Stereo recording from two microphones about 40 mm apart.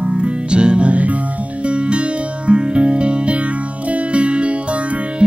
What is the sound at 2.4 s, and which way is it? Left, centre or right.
Music, right.